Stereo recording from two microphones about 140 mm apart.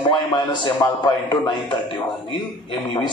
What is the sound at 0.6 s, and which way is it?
A man's voice, 35° left (ahead or behind).